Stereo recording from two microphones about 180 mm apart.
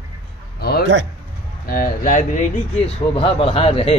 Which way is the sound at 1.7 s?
50° left (ahead or behind).